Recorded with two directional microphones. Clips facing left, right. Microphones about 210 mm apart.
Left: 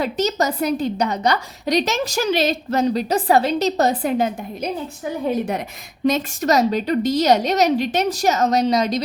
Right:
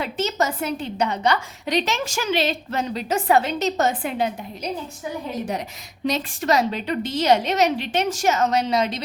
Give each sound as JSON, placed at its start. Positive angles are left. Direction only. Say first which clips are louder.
{"t": 0.0, "sound": "a woman's voice", "louder": "left 3 dB", "side_deg": 40}
{"t": 5.3, "sound": "a woman's voice", "louder": "left 5 dB", "side_deg": 55}
{"t": 6.1, "sound": "a woman's voice", "louder": "left 4 dB", "side_deg": 45}